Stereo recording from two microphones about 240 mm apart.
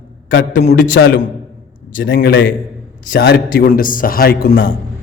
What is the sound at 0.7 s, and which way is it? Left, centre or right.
A man's voice, left.